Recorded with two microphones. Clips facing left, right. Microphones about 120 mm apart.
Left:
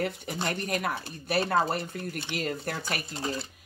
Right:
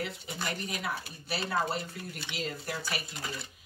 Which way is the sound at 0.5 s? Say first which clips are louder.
Left 5 dB; 55° left (ahead or behind).